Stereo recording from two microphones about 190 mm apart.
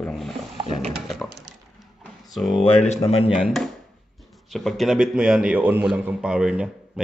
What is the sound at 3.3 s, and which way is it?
A man's voice, centre (ahead or behind).